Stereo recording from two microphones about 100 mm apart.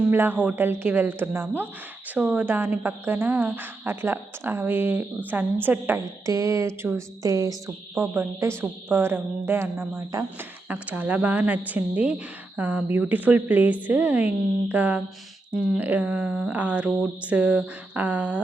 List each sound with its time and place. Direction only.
0.1 s speech: 20° right (ahead or behind)
6.2 s speech: 30° right (ahead or behind)
7.9 s speech: 20° right (ahead or behind)